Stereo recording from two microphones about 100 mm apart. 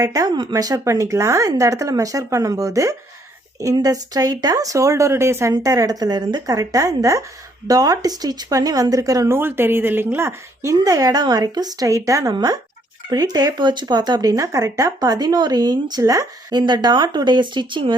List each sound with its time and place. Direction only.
0.0 s speech: 40° right (ahead or behind)